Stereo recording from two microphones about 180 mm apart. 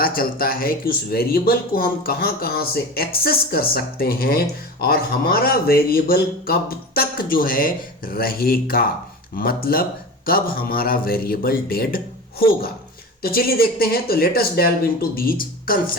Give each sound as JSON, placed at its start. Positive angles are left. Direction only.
{"t": 0.0, "sound": "speech", "side_deg": 55}